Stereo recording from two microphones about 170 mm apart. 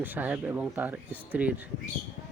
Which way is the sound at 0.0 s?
10° right (ahead or behind).